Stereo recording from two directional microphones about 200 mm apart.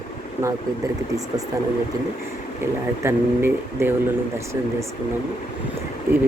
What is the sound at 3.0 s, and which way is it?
Speech, 10° right (ahead or behind).